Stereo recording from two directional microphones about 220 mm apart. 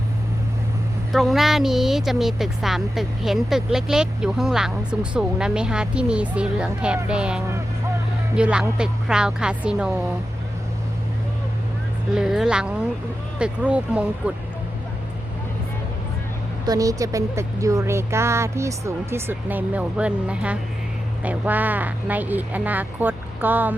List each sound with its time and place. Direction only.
1.1 s speech: centre (ahead or behind)
12.1 s speech: centre (ahead or behind)
16.6 s speech: 15° right (ahead or behind)